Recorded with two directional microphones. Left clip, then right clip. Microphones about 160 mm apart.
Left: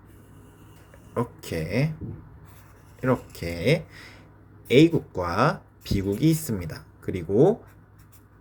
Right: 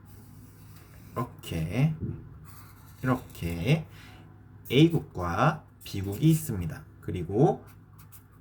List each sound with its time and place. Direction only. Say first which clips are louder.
1.1 s speech: left 6 dB; 25° left (ahead or behind)
3.0 s speech: left 5 dB; 25° left (ahead or behind)